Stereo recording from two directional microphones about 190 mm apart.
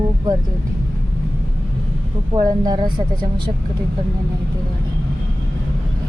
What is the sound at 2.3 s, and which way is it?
Speech, 20° right (ahead or behind).